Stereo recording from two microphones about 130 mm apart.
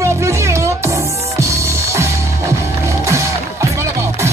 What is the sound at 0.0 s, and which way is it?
Music, 20° right (ahead or behind).